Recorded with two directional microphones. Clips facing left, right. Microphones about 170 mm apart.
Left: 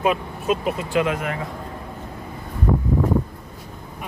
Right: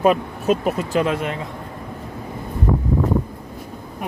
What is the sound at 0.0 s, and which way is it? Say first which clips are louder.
Speech: right 5 dB; 40° right (ahead or behind).